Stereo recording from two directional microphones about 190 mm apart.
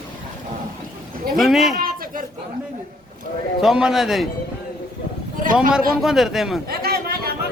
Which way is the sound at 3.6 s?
5° right (ahead or behind).